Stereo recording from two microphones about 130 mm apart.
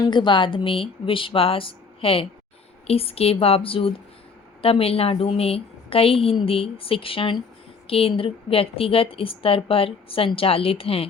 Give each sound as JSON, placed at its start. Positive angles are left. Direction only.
{"t": 0.0, "sound": "a woman's voice", "side_deg": 35}